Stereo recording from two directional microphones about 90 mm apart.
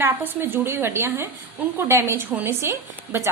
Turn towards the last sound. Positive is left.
turn(degrees=-30)  # may be behind; listen again after turning